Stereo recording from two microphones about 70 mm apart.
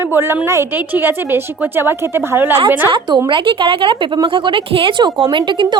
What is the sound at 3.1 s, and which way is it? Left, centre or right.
Speech, right.